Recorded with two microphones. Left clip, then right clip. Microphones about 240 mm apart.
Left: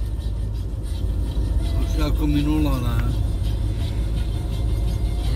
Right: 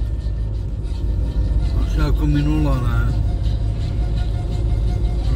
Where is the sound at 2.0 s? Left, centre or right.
Right.